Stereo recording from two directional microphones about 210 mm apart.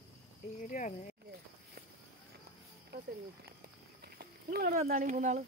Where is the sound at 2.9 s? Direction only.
50° right (ahead or behind).